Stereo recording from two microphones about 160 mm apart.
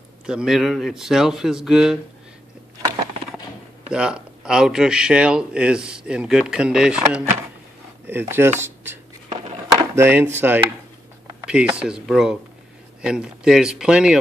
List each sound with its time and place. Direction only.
0.3 s speech: 5° right (ahead or behind)
3.9 s speech: 5° right (ahead or behind)
9.7 s a sound: 15° right (ahead or behind)
11.4 s speech: 5° right (ahead or behind)